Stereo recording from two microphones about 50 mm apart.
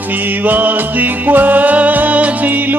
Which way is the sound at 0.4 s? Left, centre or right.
Right.